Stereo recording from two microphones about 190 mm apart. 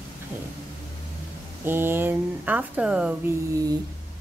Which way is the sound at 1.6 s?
10° right (ahead or behind).